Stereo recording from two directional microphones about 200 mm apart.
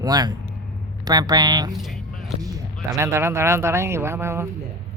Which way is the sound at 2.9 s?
15° right (ahead or behind).